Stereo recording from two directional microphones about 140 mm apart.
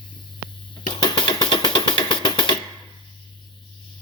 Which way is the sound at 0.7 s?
35° left (ahead or behind).